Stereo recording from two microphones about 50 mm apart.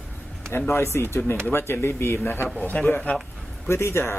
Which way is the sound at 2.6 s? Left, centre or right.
Left.